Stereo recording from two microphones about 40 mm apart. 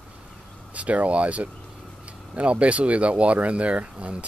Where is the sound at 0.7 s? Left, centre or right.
Right.